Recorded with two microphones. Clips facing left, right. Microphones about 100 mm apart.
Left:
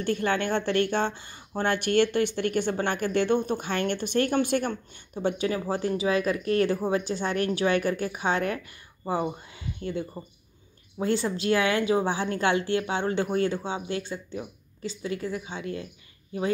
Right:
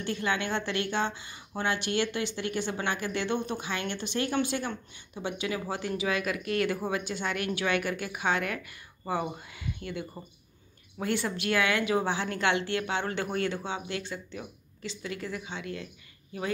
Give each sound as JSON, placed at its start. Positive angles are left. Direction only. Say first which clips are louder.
{"t": 0.0, "sound": "speech", "louder": "left 4 dB", "side_deg": 45}
{"t": 5.2, "sound": "speech", "louder": "left 6 dB", "side_deg": 40}